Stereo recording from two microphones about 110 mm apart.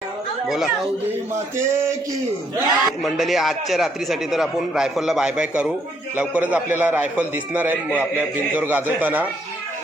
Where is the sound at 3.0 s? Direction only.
Centre (ahead or behind).